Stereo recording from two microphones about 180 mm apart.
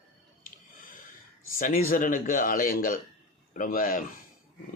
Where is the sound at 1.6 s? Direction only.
50° left (ahead or behind).